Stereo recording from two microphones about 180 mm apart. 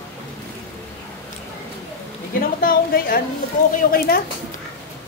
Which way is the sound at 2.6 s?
55° left (ahead or behind).